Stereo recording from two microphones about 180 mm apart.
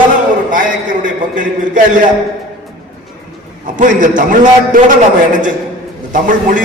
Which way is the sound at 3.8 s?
45° right (ahead or behind).